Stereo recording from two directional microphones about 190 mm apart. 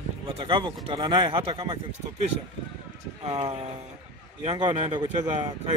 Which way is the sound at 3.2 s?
30° right (ahead or behind).